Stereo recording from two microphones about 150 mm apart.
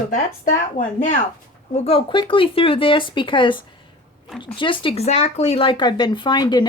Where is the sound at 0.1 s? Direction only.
65° left (ahead or behind).